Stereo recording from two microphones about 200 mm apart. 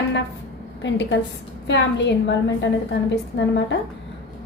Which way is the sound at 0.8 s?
65° left (ahead or behind).